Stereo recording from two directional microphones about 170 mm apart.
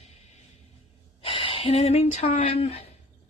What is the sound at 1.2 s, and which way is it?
Speech, 30° left (ahead or behind).